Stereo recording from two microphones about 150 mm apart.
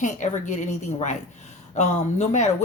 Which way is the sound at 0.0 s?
55° left (ahead or behind).